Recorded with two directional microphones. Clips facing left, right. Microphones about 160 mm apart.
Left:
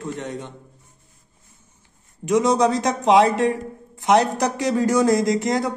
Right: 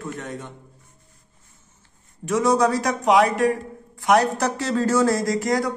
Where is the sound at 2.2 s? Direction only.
20° left (ahead or behind).